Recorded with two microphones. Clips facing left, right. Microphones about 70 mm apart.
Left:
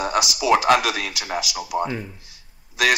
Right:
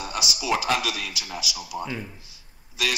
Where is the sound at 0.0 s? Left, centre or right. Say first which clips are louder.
Left 8 dB; left.